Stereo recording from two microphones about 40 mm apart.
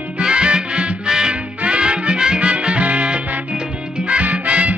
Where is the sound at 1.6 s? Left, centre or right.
Right.